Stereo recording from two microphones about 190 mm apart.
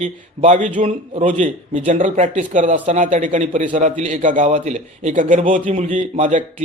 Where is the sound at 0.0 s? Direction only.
40° right (ahead or behind).